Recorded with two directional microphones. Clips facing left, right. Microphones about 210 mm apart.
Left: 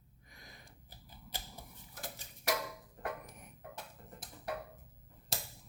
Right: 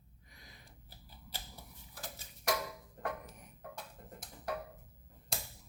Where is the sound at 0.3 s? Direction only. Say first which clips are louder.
Left 2 dB; 50° left (ahead or behind).